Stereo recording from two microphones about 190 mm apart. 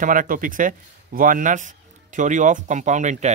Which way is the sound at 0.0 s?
45° right (ahead or behind).